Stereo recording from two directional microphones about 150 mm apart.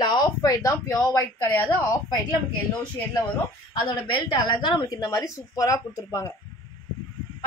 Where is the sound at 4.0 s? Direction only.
35° left (ahead or behind).